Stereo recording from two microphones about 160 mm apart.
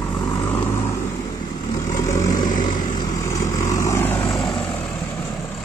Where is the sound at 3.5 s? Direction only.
20° left (ahead or behind).